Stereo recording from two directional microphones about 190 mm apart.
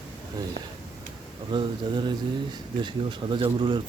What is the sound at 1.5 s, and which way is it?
Speech, 25° right (ahead or behind).